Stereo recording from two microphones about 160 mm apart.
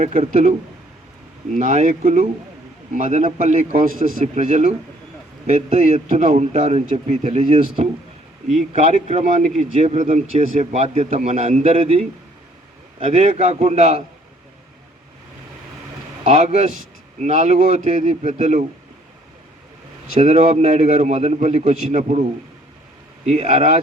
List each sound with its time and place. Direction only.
0.0 s a man's voice: 50° right (ahead or behind)
1.5 s a man's voice: 50° right (ahead or behind)
3.8 s a man's voice: 70° left (ahead or behind)
4.4 s a man's voice: 50° right (ahead or behind)
8.7 s a man's voice: 45° right (ahead or behind)
16.2 s a man's voice: 45° right (ahead or behind)
20.1 s a man's voice: 50° right (ahead or behind)
23.2 s a man's voice: 45° right (ahead or behind)